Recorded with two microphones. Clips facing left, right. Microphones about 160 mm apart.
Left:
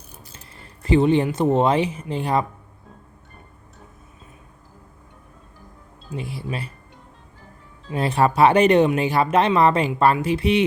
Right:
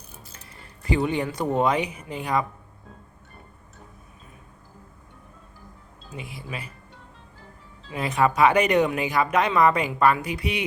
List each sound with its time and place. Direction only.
0.9 s speech: 25° left (ahead or behind)
6.1 s speech: 35° left (ahead or behind)
7.9 s speech: 30° left (ahead or behind)